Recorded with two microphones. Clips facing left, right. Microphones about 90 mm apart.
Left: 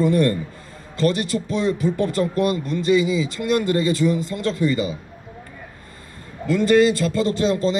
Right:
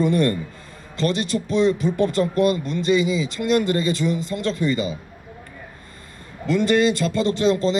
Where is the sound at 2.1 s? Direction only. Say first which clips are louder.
Right 1 dB; 20° left (ahead or behind).